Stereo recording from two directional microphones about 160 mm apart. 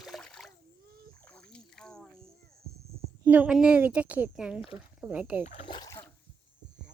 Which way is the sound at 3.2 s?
10° right (ahead or behind).